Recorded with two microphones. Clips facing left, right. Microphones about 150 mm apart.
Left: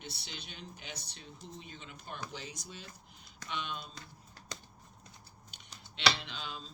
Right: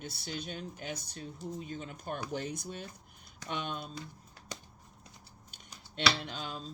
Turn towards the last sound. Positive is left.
turn(degrees=-45)  # may be behind; listen again after turning